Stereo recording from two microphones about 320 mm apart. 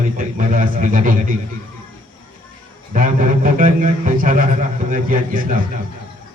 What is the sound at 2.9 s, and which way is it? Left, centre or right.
A man's voice, right.